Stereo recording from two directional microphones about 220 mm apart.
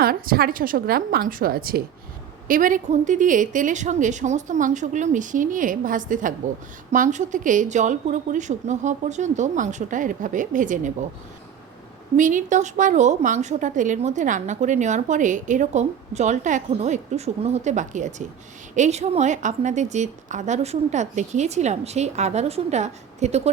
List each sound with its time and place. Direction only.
0.0 s a woman's voice: 40° right (ahead or behind)
12.1 s a woman's voice: 35° right (ahead or behind)